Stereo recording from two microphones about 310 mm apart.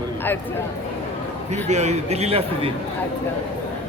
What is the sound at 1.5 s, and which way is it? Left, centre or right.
A man's voice, right.